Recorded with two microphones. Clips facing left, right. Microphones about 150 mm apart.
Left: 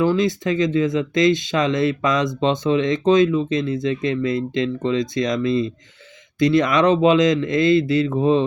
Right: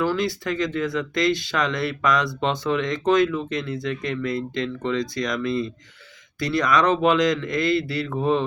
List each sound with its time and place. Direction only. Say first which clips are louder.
0.0 s speech: left 5 dB; 20° left (ahead or behind)